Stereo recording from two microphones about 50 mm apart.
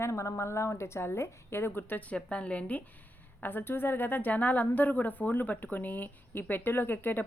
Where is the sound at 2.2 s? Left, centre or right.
Left.